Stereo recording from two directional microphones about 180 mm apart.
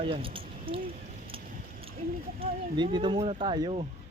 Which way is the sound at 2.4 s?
25° right (ahead or behind).